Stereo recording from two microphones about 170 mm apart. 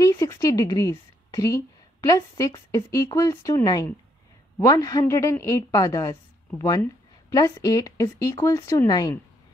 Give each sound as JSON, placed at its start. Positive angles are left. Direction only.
{"t": 0.0, "sound": "a woman's voice", "side_deg": 20}